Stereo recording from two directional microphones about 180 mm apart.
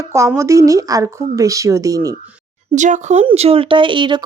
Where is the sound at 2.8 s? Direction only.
45° right (ahead or behind); by 4.2 s 25° right (ahead or behind).